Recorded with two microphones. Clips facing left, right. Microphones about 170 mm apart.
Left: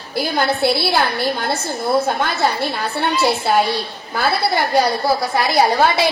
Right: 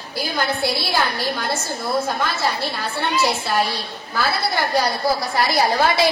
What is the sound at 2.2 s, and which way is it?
Speech, 50° left (ahead or behind).